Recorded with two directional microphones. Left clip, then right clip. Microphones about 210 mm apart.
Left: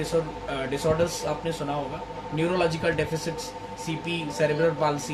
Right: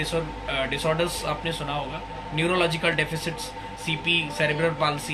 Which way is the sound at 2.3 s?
20° left (ahead or behind).